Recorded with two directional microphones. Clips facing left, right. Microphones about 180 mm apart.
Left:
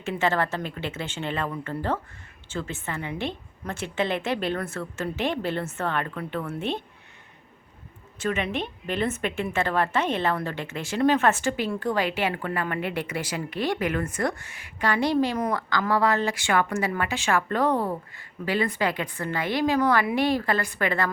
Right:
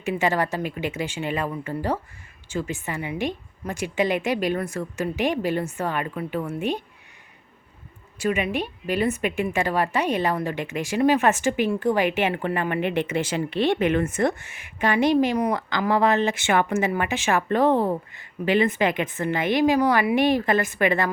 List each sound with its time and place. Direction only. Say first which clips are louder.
0.0 s a woman's voice: right 2 dB; 15° right (ahead or behind)
8.2 s a woman's voice: right 3 dB; 10° right (ahead or behind)